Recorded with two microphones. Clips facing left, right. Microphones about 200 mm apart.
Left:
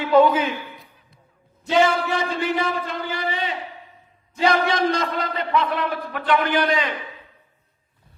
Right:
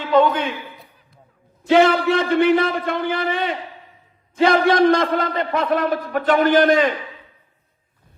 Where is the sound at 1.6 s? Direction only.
60° right (ahead or behind).